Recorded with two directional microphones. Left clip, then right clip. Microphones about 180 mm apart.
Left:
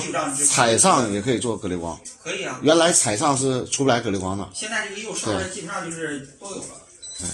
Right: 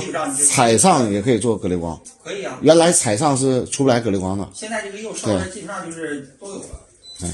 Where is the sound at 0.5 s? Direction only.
55° right (ahead or behind).